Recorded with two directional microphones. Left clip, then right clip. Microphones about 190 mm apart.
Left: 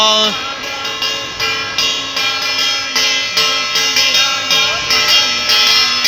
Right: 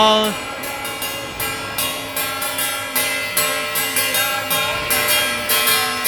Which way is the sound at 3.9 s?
35° right (ahead or behind).